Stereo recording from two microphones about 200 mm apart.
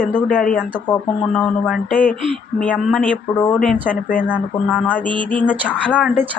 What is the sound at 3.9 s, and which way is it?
Speech, 40° left (ahead or behind).